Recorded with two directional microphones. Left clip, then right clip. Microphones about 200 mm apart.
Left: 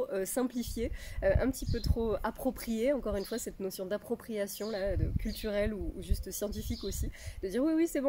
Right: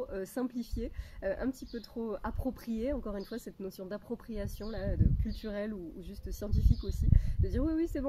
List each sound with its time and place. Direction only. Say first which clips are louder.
0.0 s speech: left 4 dB; 5° left (ahead or behind)